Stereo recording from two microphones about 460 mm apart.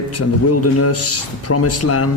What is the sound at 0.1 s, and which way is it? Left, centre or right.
Speech, left.